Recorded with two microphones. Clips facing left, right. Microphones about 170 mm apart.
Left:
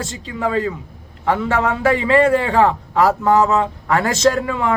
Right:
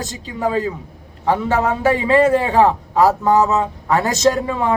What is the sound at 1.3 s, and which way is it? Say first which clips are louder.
A man's voice: right 1 dB; 15° right (ahead or behind).